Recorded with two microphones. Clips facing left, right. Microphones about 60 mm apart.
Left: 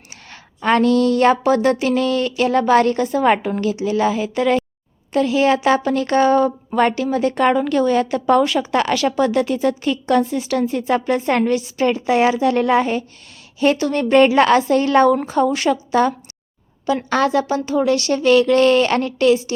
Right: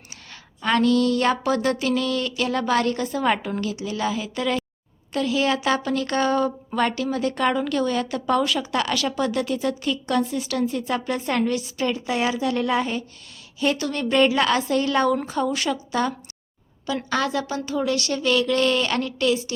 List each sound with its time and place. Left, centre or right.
0.6 s speech: left